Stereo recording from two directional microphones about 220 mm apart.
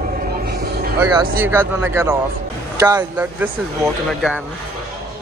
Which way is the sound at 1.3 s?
10° right (ahead or behind).